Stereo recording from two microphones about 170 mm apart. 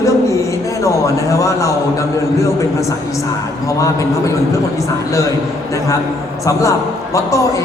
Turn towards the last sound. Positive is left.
turn(degrees=20)  # may be behind; listen again after turning